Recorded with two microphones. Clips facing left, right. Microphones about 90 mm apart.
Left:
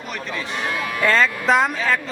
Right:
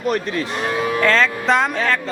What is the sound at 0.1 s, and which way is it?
Speech, 50° right (ahead or behind).